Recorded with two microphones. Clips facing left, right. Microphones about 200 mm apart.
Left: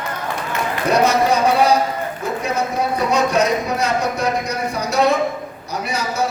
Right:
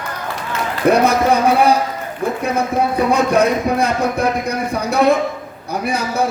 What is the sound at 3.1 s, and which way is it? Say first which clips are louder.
Speech: right 2 dB; 55° right (ahead or behind).